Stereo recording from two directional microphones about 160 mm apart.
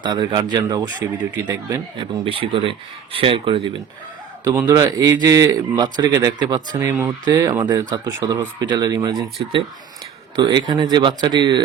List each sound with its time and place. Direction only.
0.0 s speech: 25° right (ahead or behind)
10.3 s speech: 25° right (ahead or behind)